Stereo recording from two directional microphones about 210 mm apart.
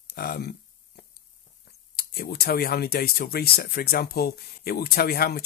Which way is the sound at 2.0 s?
45° left (ahead or behind).